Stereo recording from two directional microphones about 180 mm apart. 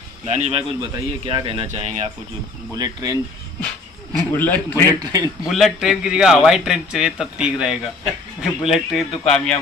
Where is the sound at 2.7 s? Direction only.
20° right (ahead or behind).